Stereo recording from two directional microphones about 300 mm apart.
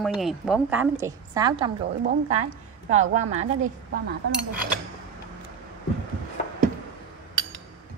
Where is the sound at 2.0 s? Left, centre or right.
Right.